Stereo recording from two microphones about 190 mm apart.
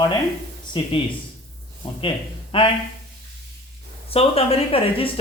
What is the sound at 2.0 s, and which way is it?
Speech, 25° left (ahead or behind).